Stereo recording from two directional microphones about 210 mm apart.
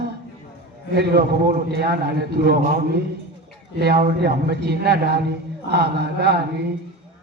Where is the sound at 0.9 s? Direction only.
50° right (ahead or behind).